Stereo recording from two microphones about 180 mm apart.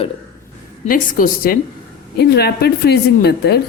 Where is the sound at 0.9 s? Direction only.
50° left (ahead or behind).